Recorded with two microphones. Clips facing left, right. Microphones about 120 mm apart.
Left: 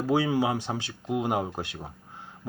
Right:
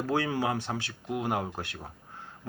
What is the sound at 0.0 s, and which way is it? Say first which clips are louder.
Speech: left 4 dB; 10° left (ahead or behind).